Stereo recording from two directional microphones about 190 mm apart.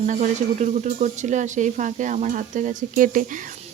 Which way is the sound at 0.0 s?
40° right (ahead or behind).